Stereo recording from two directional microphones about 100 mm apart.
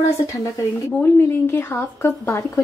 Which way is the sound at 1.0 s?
20° left (ahead or behind).